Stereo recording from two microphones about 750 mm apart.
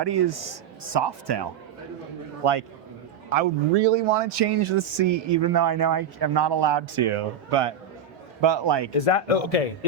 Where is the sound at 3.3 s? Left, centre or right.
Right.